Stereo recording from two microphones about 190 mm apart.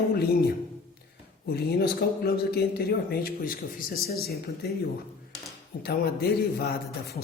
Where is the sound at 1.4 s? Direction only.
55° left (ahead or behind).